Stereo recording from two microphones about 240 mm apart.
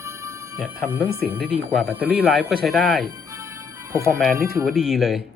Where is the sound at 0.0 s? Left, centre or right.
Centre.